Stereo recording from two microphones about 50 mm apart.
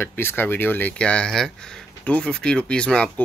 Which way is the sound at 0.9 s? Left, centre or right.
Left.